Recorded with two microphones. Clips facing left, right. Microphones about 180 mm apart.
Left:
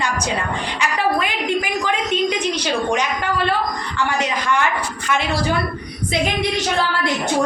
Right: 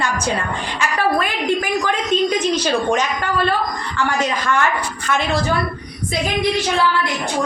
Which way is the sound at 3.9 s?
15° left (ahead or behind).